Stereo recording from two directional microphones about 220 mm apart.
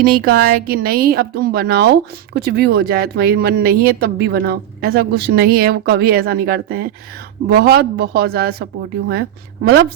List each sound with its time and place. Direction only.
0.0 s a woman's voice: 45° right (ahead or behind)